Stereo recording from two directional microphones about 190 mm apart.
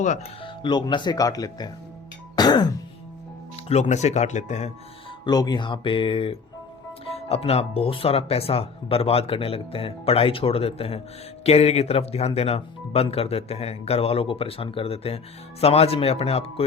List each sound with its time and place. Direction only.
0.4 s speech: 25° left (ahead or behind)
2.3 s throat clearing: 20° left (ahead or behind)
3.7 s speech: 35° left (ahead or behind)
5.2 s speech: 20° left (ahead or behind)